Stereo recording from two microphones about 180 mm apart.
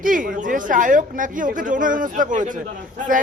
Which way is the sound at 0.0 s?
50° right (ahead or behind).